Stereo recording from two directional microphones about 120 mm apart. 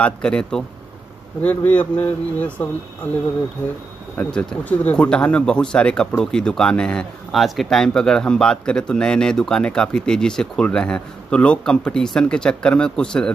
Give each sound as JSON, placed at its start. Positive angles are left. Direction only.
{"t": 0.0, "sound": "speech", "side_deg": 5}
{"t": 4.2, "sound": "speech", "side_deg": 10}